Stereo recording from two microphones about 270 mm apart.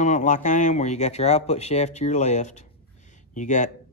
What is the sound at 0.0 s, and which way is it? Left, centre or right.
Speech, left.